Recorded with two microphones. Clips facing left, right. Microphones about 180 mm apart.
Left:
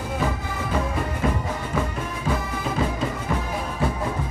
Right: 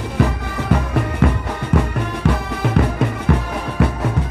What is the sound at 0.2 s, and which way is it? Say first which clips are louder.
Music: right 10 dB; 75° right (ahead or behind).